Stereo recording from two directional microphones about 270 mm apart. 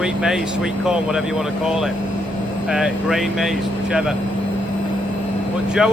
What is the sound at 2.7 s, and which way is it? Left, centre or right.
Speech, centre.